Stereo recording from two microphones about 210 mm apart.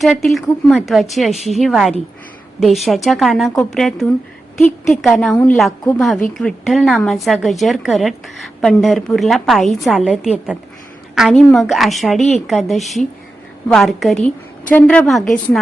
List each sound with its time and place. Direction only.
0.0 s speech: centre (ahead or behind)